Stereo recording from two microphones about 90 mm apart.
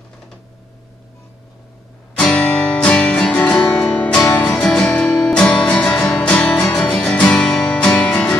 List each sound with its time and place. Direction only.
2.2 s music: 10° left (ahead or behind)
3.3 s music: 20° left (ahead or behind)
4.6 s music: 10° left (ahead or behind)